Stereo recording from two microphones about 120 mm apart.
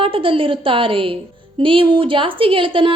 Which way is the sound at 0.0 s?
45° right (ahead or behind).